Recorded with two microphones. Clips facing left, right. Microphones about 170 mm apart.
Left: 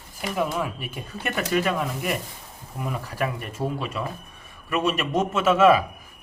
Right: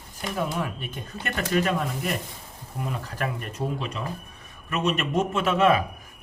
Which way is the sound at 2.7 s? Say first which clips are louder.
Left 1 dB; centre (ahead or behind).